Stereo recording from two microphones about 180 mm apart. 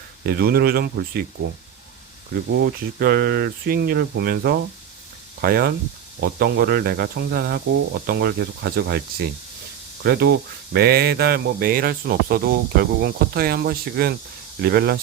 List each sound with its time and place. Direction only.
0.3 s speech: 60° right (ahead or behind)
3.0 s speech: 60° right (ahead or behind)
10.0 s speech: 60° right (ahead or behind)